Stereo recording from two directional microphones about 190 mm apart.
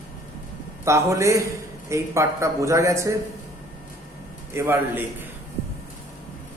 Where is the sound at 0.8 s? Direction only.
15° right (ahead or behind).